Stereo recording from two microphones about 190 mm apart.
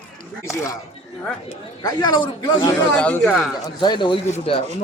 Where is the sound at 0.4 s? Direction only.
15° left (ahead or behind).